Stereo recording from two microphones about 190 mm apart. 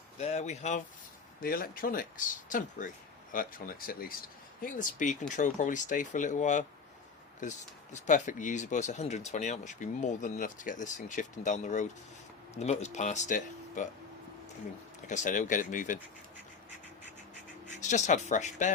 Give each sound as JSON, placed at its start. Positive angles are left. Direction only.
{"t": 0.2, "sound": "speech", "side_deg": 35}
{"t": 1.4, "sound": "speech", "side_deg": 50}
{"t": 7.9, "sound": "speech", "side_deg": 40}
{"t": 15.0, "sound": "speech", "side_deg": 40}
{"t": 17.7, "sound": "speech", "side_deg": 40}